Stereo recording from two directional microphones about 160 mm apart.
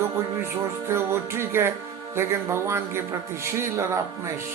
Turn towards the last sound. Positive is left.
turn(degrees=-15)  # may be behind; listen again after turning